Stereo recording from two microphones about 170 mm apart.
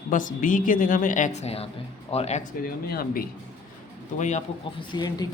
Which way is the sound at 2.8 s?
65° left (ahead or behind).